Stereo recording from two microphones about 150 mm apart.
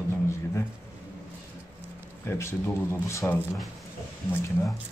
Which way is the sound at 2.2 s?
15° left (ahead or behind).